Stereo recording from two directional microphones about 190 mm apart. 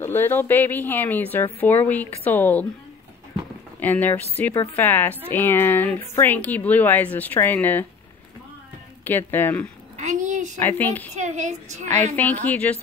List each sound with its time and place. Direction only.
0.0 s speech: 10° left (ahead or behind)
3.8 s speech: 10° left (ahead or behind)
9.0 s speech: 10° left (ahead or behind)
9.9 s a sound: 40° right (ahead or behind)
10.6 s speech: 10° left (ahead or behind)
11.1 s a woman's voice: 40° right (ahead or behind)
12.2 s speech: 10° left (ahead or behind)